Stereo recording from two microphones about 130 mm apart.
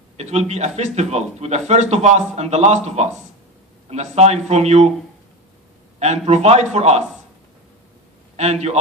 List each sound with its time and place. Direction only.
0.2 s a man's voice: 55° right (ahead or behind)
6.0 s a man's voice: 60° right (ahead or behind)
8.4 s a man's voice: 55° right (ahead or behind)